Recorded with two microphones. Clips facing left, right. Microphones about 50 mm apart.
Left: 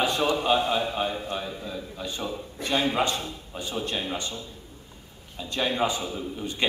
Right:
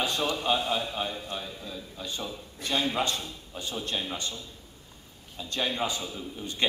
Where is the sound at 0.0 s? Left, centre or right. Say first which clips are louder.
Left 4 dB; left.